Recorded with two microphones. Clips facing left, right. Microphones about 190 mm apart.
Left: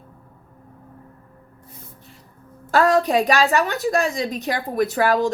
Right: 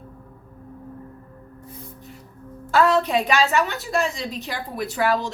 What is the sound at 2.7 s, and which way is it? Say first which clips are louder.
Speech: left 2 dB; 40° left (ahead or behind).